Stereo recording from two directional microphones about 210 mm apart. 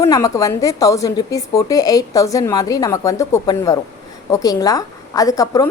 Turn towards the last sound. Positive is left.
turn(degrees=15)  # may be behind; listen again after turning